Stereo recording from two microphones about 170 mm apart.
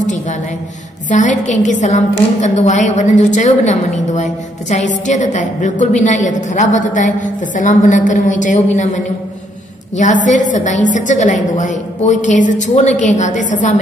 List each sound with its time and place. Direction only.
1.1 s a woman's voice: 45° left (ahead or behind)
10.2 s a woman's voice: 45° left (ahead or behind)